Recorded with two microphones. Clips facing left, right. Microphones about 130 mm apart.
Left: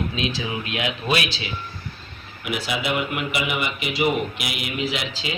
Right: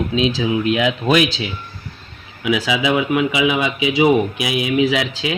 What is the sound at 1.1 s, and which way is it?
Speech, 50° right (ahead or behind).